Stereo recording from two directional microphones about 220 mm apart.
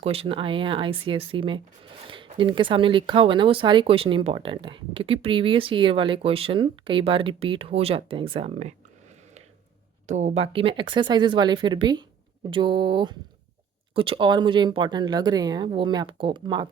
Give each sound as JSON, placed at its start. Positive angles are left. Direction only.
{"t": 0.0, "sound": "speech", "side_deg": -25}
{"t": 10.1, "sound": "speech", "side_deg": -30}